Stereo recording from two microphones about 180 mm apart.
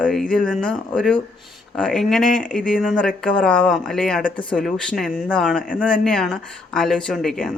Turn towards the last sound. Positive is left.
turn(degrees=0)  # may be behind; listen again after turning